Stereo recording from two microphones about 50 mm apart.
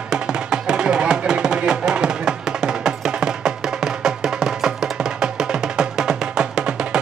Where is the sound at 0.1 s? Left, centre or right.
Centre.